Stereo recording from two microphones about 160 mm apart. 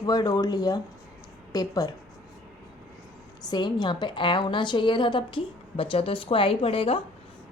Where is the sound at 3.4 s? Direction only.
30° left (ahead or behind).